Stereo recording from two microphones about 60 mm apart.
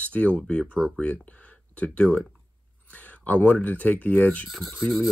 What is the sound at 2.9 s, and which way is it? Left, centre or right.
Speech, left.